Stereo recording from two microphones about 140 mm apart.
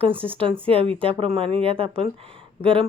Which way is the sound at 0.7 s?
40° right (ahead or behind).